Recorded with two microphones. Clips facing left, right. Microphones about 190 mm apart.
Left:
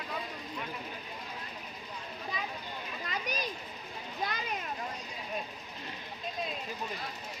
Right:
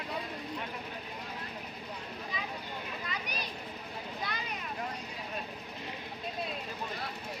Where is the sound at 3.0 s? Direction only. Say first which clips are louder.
Left 7 dB; 45° left (ahead or behind).